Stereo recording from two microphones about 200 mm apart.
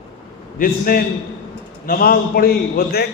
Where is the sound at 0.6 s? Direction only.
45° left (ahead or behind).